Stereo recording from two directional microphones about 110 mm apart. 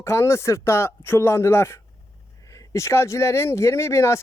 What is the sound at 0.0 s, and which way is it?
Speech, 25° left (ahead or behind).